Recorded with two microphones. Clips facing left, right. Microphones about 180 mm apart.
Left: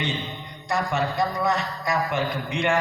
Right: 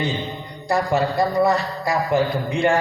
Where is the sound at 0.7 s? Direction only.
35° right (ahead or behind).